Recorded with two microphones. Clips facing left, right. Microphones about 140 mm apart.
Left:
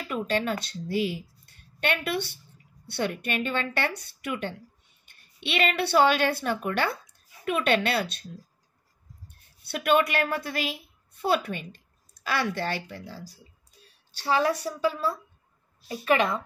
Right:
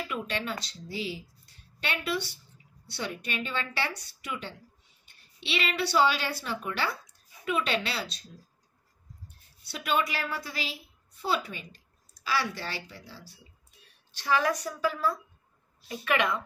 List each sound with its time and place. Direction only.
0.1 s a woman's voice: 45° left (ahead or behind)
9.7 s a woman's voice: 60° left (ahead or behind); by 16.3 s 30° left (ahead or behind)